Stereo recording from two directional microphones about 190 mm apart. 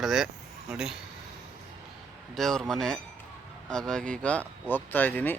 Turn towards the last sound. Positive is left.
turn(degrees=10)  # may be behind; listen again after turning